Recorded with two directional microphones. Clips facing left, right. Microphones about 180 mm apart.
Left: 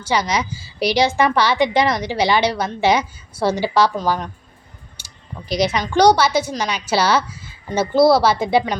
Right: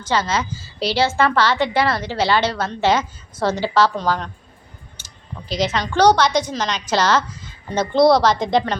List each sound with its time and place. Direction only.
0.0 s a woman's voice: 15° left (ahead or behind)
4.9 s a sound: 10° left (ahead or behind)
5.9 s a woman's voice: 10° left (ahead or behind)